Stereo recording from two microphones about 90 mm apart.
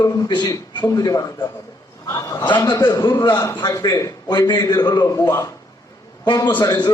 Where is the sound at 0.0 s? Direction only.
55° left (ahead or behind).